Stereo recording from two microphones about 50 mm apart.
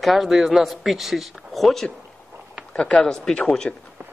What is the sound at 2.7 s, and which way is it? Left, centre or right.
A man's voice, left.